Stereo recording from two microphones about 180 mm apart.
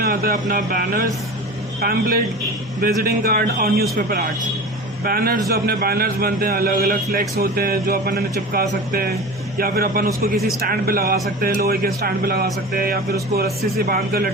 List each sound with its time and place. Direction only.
0.0 s a man's voice: 55° right (ahead or behind)
5.0 s a man's voice: 55° right (ahead or behind)